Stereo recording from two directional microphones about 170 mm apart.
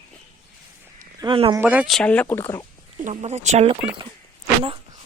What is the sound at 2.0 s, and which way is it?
Speech, 10° left (ahead or behind).